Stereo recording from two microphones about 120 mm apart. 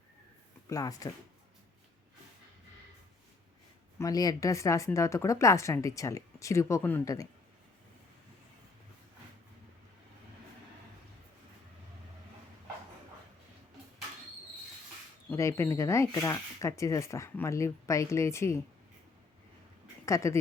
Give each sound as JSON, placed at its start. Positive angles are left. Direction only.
{"t": 0.7, "sound": "speech", "side_deg": 30}
{"t": 3.9, "sound": "speech", "side_deg": 30}
{"t": 15.3, "sound": "speech", "side_deg": 25}
{"t": 20.1, "sound": "speech", "side_deg": 25}